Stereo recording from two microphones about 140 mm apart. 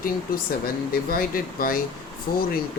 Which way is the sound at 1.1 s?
90° left.